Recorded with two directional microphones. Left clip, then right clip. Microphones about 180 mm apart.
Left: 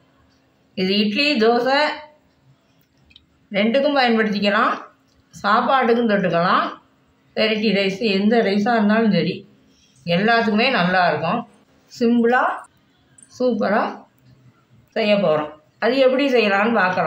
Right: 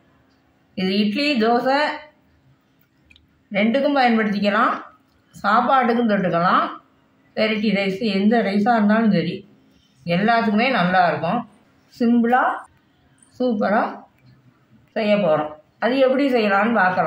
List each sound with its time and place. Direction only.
0.7 s a woman's voice: 15° left (ahead or behind)
3.5 s a woman's voice: 15° left (ahead or behind)
13.4 s a woman's voice: 15° left (ahead or behind)
15.0 s a woman's voice: 15° left (ahead or behind)